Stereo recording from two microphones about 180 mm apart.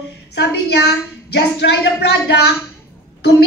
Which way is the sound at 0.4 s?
65° left (ahead or behind).